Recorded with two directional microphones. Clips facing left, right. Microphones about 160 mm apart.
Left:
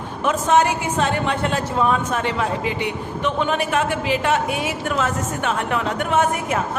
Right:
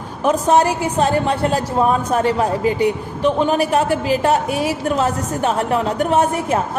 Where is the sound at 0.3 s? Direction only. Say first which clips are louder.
Right 3 dB; 35° right (ahead or behind).